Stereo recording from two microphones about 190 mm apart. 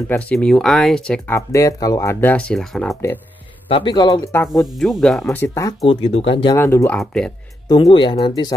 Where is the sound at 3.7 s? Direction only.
25° left (ahead or behind).